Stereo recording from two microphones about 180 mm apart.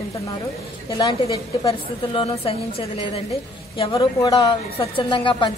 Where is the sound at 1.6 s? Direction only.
30° left (ahead or behind).